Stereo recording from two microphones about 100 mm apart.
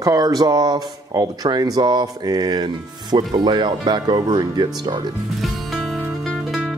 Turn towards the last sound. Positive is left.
turn(degrees=0)  # may be behind; listen again after turning